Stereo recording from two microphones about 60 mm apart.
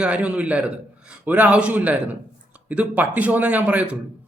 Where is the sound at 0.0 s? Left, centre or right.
Right.